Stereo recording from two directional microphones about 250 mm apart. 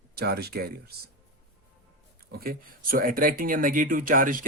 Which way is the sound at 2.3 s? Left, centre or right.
Right.